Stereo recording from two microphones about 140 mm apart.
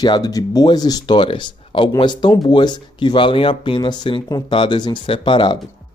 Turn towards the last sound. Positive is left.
turn(degrees=35)  # may be behind; listen again after turning